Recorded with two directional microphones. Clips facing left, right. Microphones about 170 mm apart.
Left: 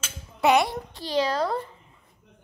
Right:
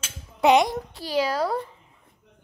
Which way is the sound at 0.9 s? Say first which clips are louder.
Even; 5° right (ahead or behind).